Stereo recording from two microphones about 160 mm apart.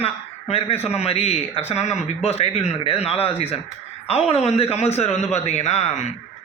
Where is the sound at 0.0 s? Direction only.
40° left (ahead or behind).